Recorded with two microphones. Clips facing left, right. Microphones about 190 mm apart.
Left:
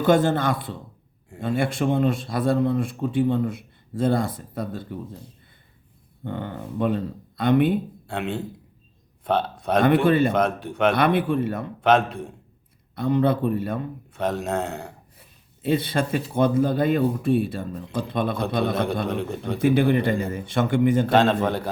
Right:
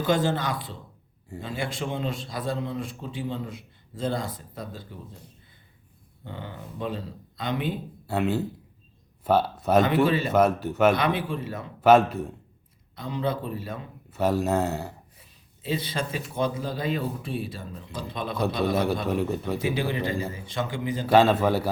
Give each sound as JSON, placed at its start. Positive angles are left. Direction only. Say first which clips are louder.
{"t": 0.0, "sound": "a man's voice", "louder": "left 5 dB", "side_deg": 55}
{"t": 6.2, "sound": "a man's voice", "louder": "left 8 dB", "side_deg": 55}
{"t": 8.0, "sound": "speech", "louder": "right 3 dB", "side_deg": -5}
{"t": 9.8, "sound": "a man's voice", "louder": "left 5 dB", "side_deg": 55}
{"t": 10.3, "sound": "speech", "louder": "right 2 dB", "side_deg": -5}
{"t": 10.9, "sound": "a man's voice", "louder": "left 6 dB", "side_deg": 60}
{"t": 11.8, "sound": "speech", "louder": "right 2 dB", "side_deg": -5}
{"t": 13.0, "sound": "a man's voice", "louder": "left 8 dB", "side_deg": 55}
{"t": 14.1, "sound": "speech", "louder": "right 2 dB", "side_deg": -5}
{"t": 15.6, "sound": "a man's voice", "louder": "left 7 dB", "side_deg": 55}
{"t": 19.0, "sound": "speech", "louder": "even", "side_deg": -5}
{"t": 19.6, "sound": "a man's voice", "louder": "left 11 dB", "side_deg": 55}
{"t": 21.1, "sound": "speech", "louder": "even", "side_deg": -5}